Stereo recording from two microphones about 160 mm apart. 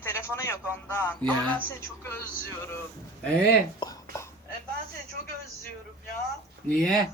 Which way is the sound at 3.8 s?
25° left (ahead or behind).